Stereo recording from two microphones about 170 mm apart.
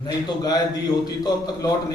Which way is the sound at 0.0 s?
20° left (ahead or behind).